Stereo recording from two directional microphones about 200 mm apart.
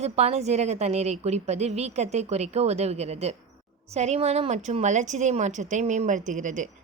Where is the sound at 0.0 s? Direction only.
30° right (ahead or behind).